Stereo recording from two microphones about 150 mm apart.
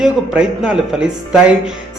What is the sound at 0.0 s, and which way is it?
A man's voice, 5° right (ahead or behind).